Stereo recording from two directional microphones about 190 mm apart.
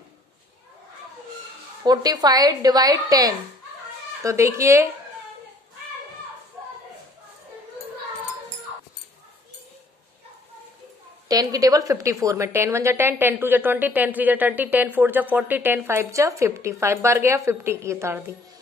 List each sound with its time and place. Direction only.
1.8 s a woman's voice: 20° right (ahead or behind)
11.2 s a woman's voice: 20° right (ahead or behind)